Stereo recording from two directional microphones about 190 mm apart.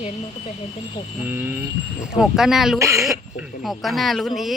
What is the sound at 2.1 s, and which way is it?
Speech, 5° right (ahead or behind).